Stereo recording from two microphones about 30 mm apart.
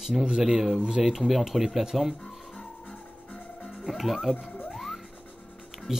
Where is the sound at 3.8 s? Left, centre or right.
Centre.